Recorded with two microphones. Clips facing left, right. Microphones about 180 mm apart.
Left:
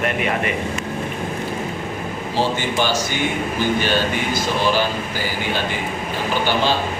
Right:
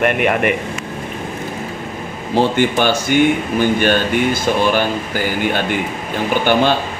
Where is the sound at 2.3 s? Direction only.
60° right (ahead or behind).